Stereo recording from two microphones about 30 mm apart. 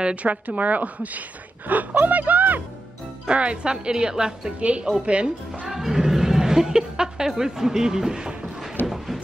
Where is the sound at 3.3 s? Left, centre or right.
Right.